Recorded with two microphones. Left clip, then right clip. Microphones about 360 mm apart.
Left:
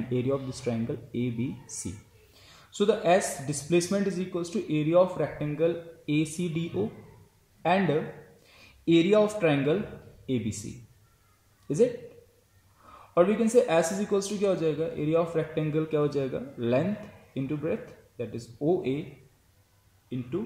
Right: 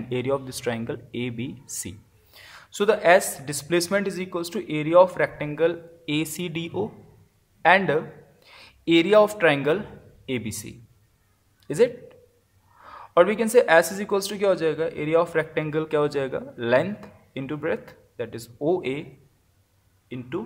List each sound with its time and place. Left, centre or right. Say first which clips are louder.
0.1 s a man's voice: right 4 dB; right
12.8 s a woman's voice: right 5 dB; right